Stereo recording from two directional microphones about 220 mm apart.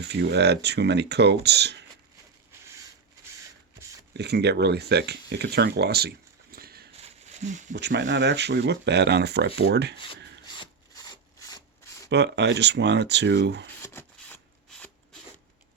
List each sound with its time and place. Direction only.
0.0 s speech: 50° right (ahead or behind)
4.1 s speech: 50° right (ahead or behind)
7.0 s a sound: 35° right (ahead or behind)
7.7 s speech: 50° right (ahead or behind)
10.6 s rub: 20° left (ahead or behind)
12.0 s speech: 50° right (ahead or behind)
13.8 s rub: 10° left (ahead or behind)